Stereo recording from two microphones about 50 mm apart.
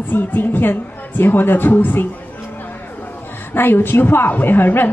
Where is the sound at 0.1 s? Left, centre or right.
Left.